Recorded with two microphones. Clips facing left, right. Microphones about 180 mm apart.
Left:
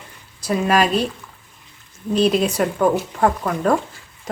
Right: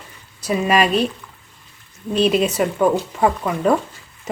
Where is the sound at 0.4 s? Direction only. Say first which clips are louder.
Even; 5° right (ahead or behind).